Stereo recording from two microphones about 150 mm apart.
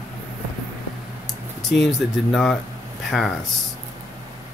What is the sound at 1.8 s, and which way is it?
Speech, centre (ahead or behind).